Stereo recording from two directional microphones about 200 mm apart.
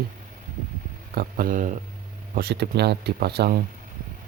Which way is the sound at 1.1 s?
45° right (ahead or behind).